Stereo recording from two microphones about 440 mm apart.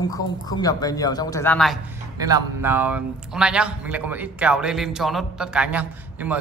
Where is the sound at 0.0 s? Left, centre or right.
Centre.